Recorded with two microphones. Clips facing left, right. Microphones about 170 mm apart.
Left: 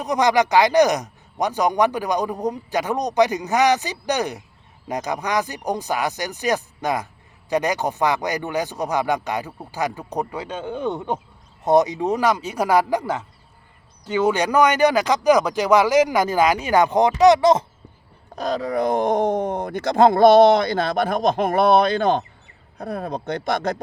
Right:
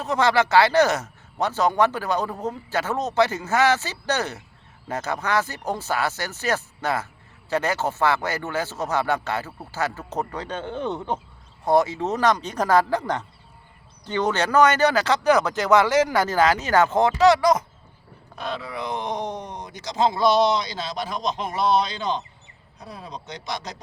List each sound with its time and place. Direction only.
0.0 s a man's voice: 15° left (ahead or behind)
11.6 s a man's voice: 20° left (ahead or behind)
18.3 s speech: 40° left (ahead or behind); by 23.7 s 55° left (ahead or behind)